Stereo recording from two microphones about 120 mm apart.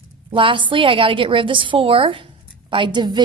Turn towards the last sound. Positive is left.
turn(degrees=-40)  # may be behind; listen again after turning